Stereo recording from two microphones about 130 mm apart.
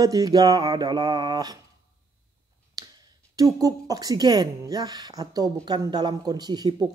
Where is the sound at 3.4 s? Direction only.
25° right (ahead or behind).